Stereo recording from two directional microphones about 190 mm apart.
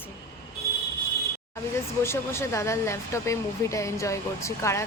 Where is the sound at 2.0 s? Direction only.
15° left (ahead or behind).